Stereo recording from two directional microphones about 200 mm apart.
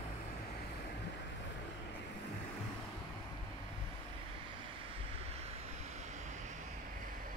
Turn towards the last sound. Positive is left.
turn(degrees=-35)  # may be behind; listen again after turning